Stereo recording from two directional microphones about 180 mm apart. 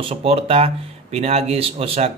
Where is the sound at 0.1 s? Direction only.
35° right (ahead or behind).